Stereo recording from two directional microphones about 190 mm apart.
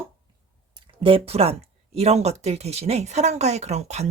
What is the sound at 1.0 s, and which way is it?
Speech, 30° right (ahead or behind).